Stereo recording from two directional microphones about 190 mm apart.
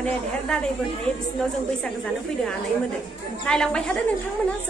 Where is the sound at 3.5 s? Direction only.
5° left (ahead or behind).